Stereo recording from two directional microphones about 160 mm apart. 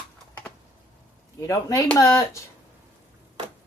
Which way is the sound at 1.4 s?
20° left (ahead or behind).